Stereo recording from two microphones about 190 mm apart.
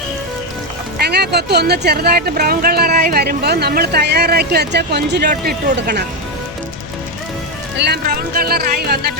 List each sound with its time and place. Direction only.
0.9 s speech: 60° right (ahead or behind)
5.3 s speech: 45° right (ahead or behind)
5.7 s speech: 60° right (ahead or behind)
7.8 s speech: 55° right (ahead or behind)